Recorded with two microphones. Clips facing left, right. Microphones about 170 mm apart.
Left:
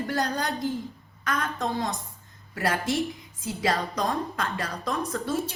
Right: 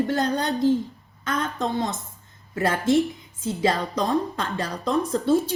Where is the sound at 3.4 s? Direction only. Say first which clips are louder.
Right 4 dB; 30° right (ahead or behind).